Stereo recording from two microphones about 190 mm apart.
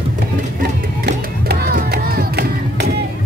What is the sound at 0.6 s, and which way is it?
Music, 55° right (ahead or behind).